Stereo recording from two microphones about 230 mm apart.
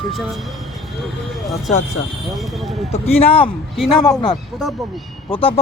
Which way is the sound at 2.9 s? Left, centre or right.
Left.